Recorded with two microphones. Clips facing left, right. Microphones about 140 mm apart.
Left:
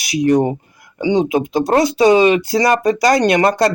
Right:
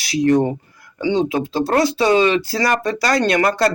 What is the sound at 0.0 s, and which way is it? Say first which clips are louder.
Speech: left 1 dB; 15° left (ahead or behind).